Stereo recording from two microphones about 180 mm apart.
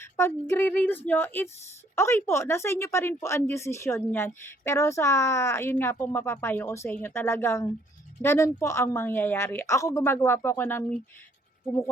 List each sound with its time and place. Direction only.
0.0 s speech: 15° left (ahead or behind)